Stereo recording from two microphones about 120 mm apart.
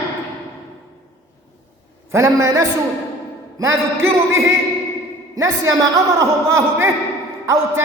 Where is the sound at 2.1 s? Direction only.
25° right (ahead or behind).